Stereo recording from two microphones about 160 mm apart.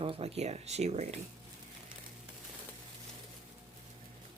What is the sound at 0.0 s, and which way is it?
Speech, 40° right (ahead or behind).